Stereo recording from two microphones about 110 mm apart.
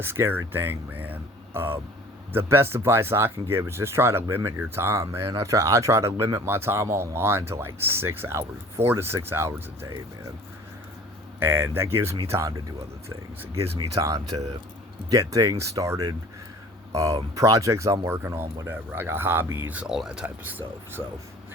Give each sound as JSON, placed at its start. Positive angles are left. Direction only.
{"t": 0.0, "sound": "speech", "side_deg": -20}
{"t": 11.4, "sound": "speech", "side_deg": -20}